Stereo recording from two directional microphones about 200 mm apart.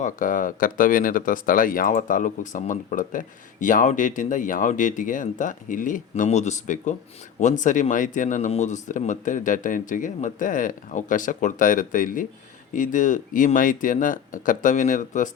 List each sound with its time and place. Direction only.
0.0 s speech: 40° left (ahead or behind)